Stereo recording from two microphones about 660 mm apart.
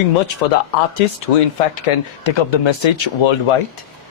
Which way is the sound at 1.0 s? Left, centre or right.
Left.